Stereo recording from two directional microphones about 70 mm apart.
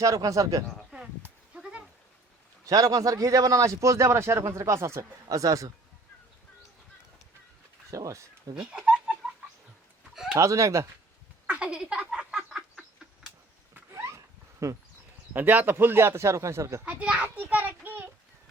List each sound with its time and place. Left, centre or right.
0.0 s a man's voice: right
1.5 s goat: centre
2.6 s a man's voice: right
7.9 s speech: right
8.5 s a sound: centre
10.3 s a man's voice: right
11.4 s a sound: centre
13.7 s a sound: right
14.6 s a man's voice: right
15.3 s speech: right
16.8 s a child's voice: centre